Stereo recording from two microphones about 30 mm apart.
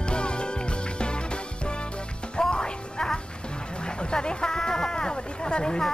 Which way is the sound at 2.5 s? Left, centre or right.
Left.